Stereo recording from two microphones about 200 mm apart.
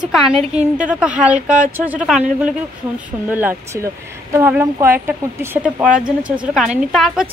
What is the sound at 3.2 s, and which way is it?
A woman's voice, 10° right (ahead or behind).